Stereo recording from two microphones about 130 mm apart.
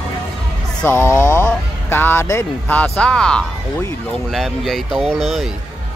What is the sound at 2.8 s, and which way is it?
Speech, 10° left (ahead or behind).